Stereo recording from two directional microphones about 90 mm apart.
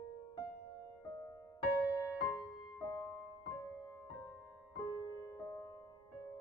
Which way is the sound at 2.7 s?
50° left (ahead or behind).